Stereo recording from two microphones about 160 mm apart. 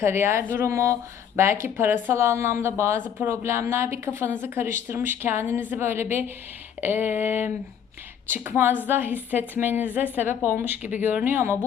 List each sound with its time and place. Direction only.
0.0 s a woman's voice: 15° right (ahead or behind)